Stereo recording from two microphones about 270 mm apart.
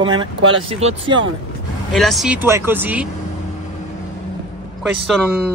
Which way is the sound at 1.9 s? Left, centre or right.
Centre.